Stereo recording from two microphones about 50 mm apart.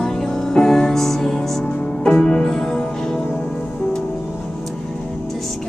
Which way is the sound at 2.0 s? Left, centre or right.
Centre.